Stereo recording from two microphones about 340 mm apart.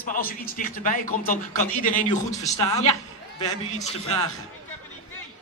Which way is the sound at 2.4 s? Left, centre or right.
Centre.